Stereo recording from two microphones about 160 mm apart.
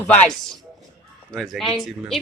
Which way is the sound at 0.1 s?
5° left (ahead or behind).